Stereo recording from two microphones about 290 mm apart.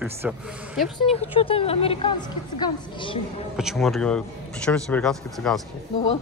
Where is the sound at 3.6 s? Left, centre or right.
Centre.